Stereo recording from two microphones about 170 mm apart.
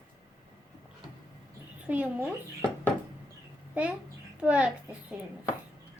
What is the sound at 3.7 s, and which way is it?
A child's voice, 5° right (ahead or behind).